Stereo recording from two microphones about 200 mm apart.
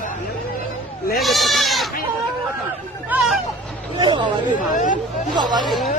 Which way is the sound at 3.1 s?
10° right (ahead or behind).